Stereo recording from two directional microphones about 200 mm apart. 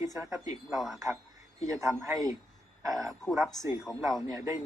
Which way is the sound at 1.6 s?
15° right (ahead or behind).